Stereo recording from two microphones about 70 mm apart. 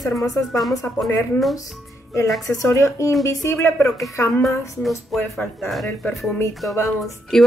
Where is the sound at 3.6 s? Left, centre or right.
Left.